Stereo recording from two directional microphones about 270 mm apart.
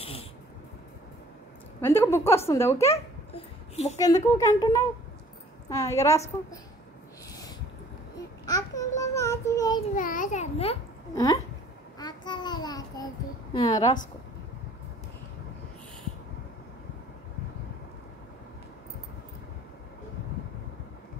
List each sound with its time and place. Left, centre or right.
1.8 s a woman's voice: centre
3.3 s a sound: left
4.0 s a woman's voice: centre
8.5 s babbling: centre
9.9 s a child's voice: left; by 13.8 s centre